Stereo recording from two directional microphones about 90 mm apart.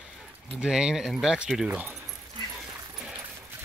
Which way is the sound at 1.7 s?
20° right (ahead or behind).